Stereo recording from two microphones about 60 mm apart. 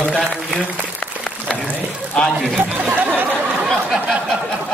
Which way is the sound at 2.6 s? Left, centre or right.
Right.